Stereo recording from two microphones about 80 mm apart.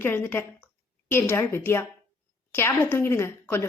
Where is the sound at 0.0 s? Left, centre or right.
Left.